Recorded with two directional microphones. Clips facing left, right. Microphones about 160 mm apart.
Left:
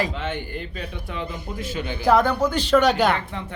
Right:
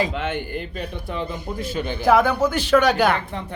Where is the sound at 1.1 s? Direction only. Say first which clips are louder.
Right 3 dB; 35° right (ahead or behind).